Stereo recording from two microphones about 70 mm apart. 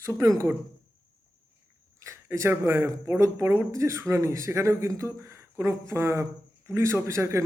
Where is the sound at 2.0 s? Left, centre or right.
Right.